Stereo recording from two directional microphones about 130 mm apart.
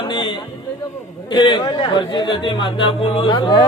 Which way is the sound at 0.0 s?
35° left (ahead or behind).